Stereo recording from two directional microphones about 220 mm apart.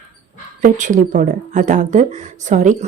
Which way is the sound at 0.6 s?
35° right (ahead or behind).